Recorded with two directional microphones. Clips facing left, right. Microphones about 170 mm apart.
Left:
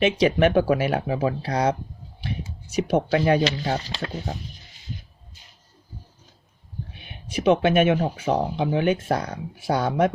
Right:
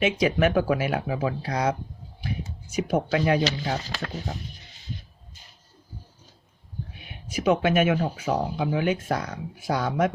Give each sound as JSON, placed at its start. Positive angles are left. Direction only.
{"t": 0.0, "sound": "speech", "side_deg": 30}
{"t": 2.9, "sound": "speech", "side_deg": 30}
{"t": 7.3, "sound": "speech", "side_deg": 30}